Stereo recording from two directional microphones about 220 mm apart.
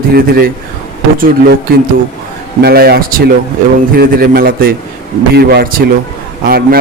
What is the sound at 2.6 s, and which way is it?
A man's voice, 45° right (ahead or behind).